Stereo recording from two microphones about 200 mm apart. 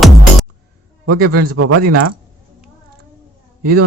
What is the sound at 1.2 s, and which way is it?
Speech, 50° right (ahead or behind).